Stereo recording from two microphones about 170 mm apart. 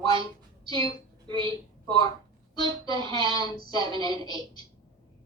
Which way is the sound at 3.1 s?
25° left (ahead or behind).